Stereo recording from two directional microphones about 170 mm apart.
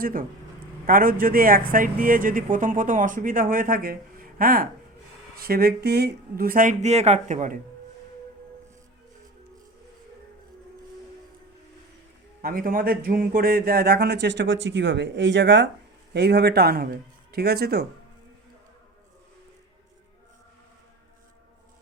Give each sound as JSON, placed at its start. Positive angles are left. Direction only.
{"t": 0.0, "sound": "speech", "side_deg": -55}
{"t": 12.4, "sound": "speech", "side_deg": -60}
{"t": 16.1, "sound": "speech", "side_deg": -75}